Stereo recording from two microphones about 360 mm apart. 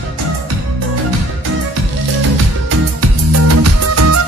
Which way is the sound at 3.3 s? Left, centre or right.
Right.